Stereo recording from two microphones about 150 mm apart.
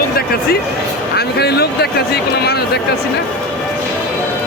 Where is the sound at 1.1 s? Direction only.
90° left.